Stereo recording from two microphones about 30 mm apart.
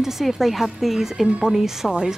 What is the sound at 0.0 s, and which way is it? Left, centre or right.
A woman's voice, centre.